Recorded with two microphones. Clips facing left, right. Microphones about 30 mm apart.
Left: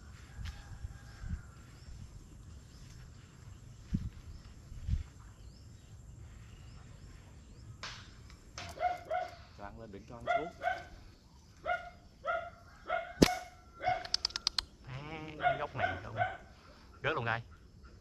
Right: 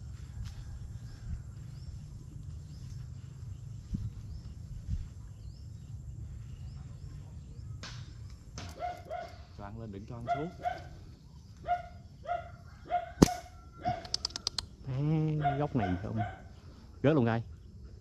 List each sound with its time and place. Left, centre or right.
7.8 s music: centre
8.5 s bow-wow: centre
9.8 s speech: centre
10.6 s speech: centre
11.6 s bow-wow: left
12.2 s dog: left
13.8 s a sound: centre
15.3 s dog: left
15.6 s speech: centre